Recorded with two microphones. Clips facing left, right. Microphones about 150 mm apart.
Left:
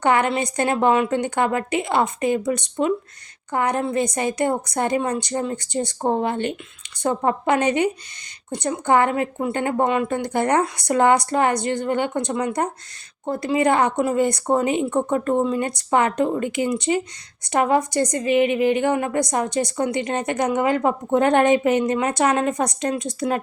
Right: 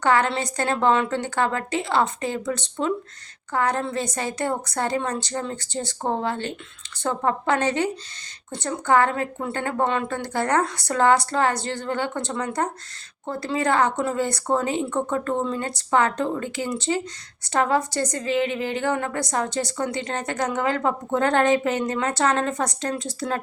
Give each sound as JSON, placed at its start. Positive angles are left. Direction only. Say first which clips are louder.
{"t": 0.0, "sound": "a woman's voice", "louder": "left 2 dB", "side_deg": 15}